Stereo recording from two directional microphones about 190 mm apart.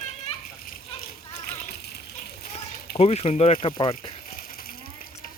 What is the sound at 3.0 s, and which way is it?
Speech, 30° left (ahead or behind).